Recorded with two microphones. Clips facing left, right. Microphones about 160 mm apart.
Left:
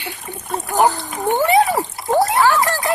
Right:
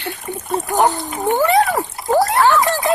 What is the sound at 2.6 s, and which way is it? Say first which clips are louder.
Speech: right 2 dB; 20° right (ahead or behind).